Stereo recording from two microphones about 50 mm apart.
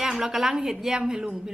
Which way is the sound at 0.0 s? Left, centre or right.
Centre.